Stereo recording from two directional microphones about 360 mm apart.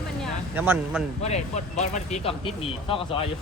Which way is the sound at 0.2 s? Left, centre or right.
Centre.